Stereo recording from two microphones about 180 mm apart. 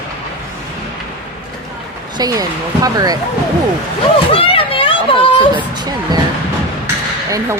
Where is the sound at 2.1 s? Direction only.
20° right (ahead or behind).